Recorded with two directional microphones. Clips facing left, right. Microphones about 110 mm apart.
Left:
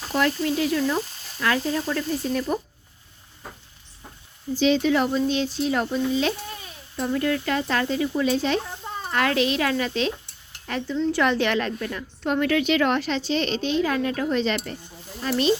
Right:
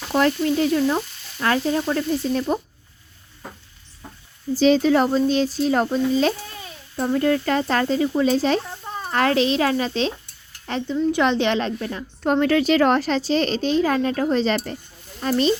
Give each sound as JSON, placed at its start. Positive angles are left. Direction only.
{"t": 0.1, "sound": "a woman's voice", "side_deg": -35}
{"t": 4.5, "sound": "a woman's voice", "side_deg": -40}
{"t": 6.9, "sound": "a woman's voice", "side_deg": -25}